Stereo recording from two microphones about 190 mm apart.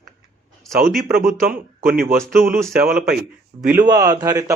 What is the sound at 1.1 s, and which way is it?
Speech, 50° right (ahead or behind).